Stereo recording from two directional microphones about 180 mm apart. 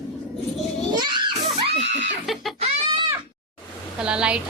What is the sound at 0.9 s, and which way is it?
Children playing, 25° right (ahead or behind).